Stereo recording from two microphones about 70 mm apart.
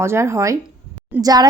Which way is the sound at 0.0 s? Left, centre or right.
Right.